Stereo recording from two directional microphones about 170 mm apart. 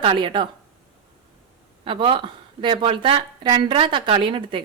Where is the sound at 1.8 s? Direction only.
30° right (ahead or behind).